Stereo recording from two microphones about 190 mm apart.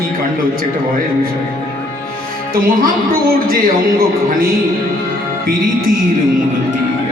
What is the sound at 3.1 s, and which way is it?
Speech, 50° right (ahead or behind).